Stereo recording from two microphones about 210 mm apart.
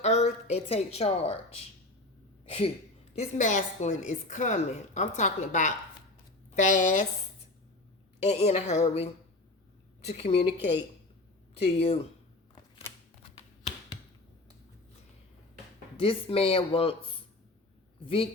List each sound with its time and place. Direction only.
0.0 s a woman's voice: 30° left (ahead or behind)
8.2 s a woman's voice: 30° left (ahead or behind)
10.1 s speech: 30° left (ahead or behind)
16.0 s speech: 25° left (ahead or behind)
18.0 s speech: 25° left (ahead or behind)